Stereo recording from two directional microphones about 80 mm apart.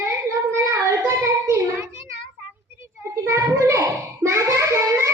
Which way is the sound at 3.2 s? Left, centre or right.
Right.